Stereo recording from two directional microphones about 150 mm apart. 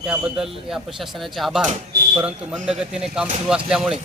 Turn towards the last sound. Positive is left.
turn(degrees=-5)  # may be behind; listen again after turning